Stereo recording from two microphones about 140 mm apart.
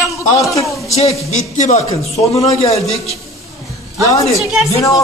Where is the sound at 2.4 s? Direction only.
25° left (ahead or behind).